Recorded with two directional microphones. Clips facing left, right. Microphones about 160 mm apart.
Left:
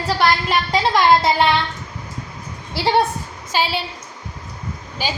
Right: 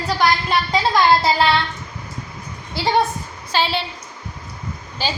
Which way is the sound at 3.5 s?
10° left (ahead or behind).